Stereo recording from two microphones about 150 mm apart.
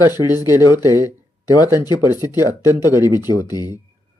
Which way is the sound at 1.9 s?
25° left (ahead or behind).